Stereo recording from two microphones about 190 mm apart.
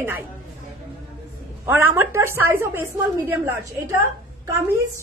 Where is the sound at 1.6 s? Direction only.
10° right (ahead or behind).